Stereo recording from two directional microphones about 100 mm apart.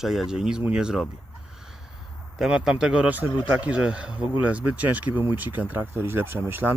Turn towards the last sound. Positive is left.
turn(degrees=-20)  # may be behind; listen again after turning